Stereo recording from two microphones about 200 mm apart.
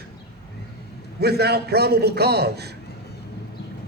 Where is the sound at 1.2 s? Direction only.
55° right (ahead or behind).